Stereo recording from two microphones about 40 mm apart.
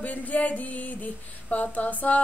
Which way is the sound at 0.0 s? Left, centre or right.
Left.